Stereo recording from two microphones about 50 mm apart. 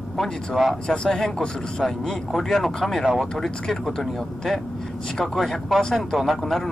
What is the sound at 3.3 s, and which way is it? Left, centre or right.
Speech, centre.